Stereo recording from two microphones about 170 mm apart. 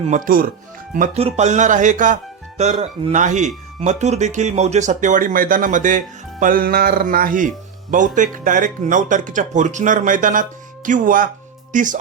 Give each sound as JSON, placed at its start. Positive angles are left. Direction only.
{"t": 0.3, "sound": "speech", "side_deg": -55}
{"t": 0.9, "sound": "speech", "side_deg": -45}